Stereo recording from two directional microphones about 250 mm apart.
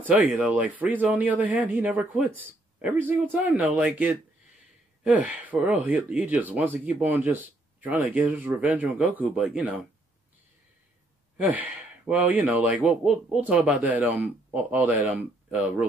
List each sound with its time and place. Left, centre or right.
0.1 s speech: centre
11.4 s speech: centre